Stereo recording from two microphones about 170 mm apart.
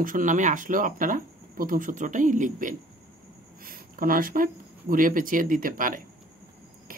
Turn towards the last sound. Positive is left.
turn(degrees=-50)  # may be behind; listen again after turning